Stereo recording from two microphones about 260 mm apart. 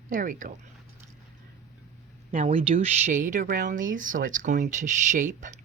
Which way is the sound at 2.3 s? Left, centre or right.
Right.